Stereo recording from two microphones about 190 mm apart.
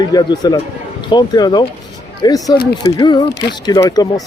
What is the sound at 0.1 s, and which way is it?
Speech, 20° left (ahead or behind).